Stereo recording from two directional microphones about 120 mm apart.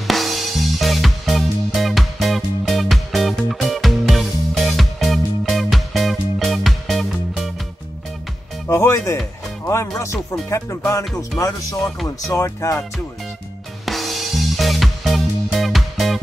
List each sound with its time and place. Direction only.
0.0 s music: centre (ahead or behind)
8.6 s music: 25° left (ahead or behind)
13.8 s music: centre (ahead or behind)